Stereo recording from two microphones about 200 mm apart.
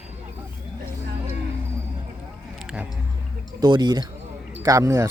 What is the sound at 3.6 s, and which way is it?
Speech, 20° right (ahead or behind).